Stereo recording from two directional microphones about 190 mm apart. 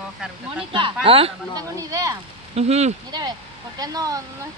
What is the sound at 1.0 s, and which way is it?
Speech, 30° right (ahead or behind).